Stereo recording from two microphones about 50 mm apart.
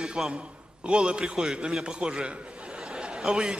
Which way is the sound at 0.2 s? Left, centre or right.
Centre.